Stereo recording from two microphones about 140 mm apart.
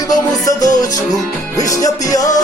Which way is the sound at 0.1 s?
25° left (ahead or behind).